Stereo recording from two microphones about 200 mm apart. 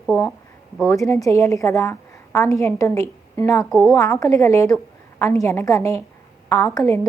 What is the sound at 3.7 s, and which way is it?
Speech, centre (ahead or behind).